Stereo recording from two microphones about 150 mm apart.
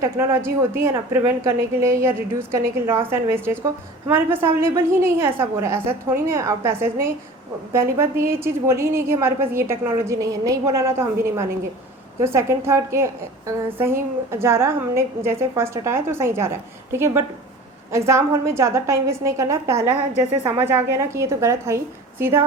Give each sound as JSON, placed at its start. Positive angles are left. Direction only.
{"t": 0.0, "sound": "a woman's voice", "side_deg": -20}